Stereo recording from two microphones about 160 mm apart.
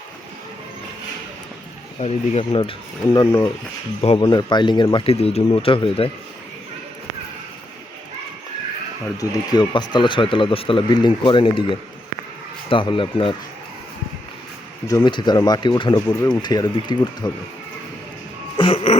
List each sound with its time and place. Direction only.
2.0 s speech: 40° left (ahead or behind)
9.1 s speech: 20° left (ahead or behind)
14.8 s speech: 25° left (ahead or behind)
16.0 s speech: 10° left (ahead or behind)
16.4 s speech: 25° left (ahead or behind)
18.5 s music: 35° left (ahead or behind)